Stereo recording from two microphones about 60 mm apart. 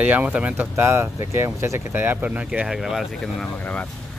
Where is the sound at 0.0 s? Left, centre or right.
Right.